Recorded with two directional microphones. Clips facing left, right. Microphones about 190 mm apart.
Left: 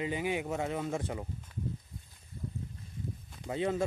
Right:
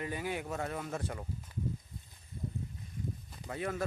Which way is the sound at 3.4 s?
25° left (ahead or behind).